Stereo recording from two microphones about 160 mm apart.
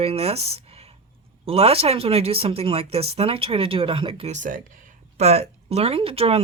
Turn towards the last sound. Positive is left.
turn(degrees=-40)  # may be behind; listen again after turning